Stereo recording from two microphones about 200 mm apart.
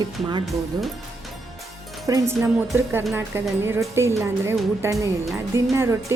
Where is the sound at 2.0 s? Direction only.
15° right (ahead or behind).